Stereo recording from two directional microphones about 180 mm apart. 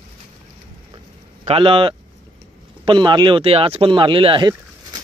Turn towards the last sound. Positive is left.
turn(degrees=-25)  # may be behind; listen again after turning